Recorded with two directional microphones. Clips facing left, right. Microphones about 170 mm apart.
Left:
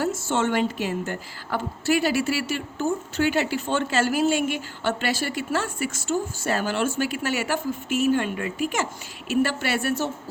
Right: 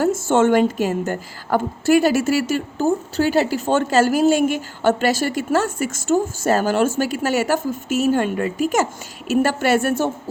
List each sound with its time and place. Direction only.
0.0 s a woman's voice: 50° right (ahead or behind)